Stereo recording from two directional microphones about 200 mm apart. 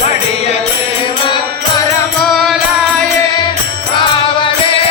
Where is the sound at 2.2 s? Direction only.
Centre (ahead or behind).